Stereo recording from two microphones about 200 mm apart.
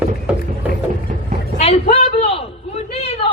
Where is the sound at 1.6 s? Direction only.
30° left (ahead or behind).